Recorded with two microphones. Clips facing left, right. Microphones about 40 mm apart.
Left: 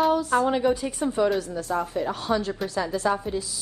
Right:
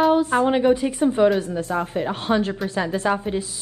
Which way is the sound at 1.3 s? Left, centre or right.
Right.